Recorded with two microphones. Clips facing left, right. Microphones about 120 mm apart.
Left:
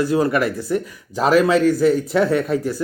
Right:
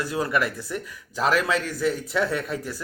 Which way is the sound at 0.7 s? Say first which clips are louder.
Left 7 dB; 40° left (ahead or behind).